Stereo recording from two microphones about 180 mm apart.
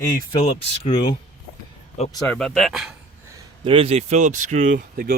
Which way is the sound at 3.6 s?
30° right (ahead or behind).